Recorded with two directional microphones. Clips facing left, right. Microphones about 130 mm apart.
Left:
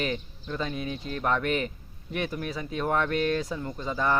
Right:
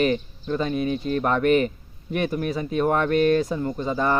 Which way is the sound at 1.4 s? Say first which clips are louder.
Right 9 dB; 55° right (ahead or behind).